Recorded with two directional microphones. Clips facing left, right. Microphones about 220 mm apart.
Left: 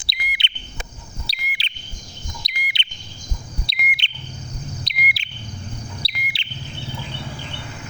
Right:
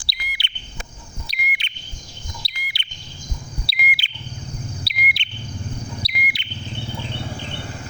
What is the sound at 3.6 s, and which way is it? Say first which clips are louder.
Bird: right 2 dB; centre (ahead or behind).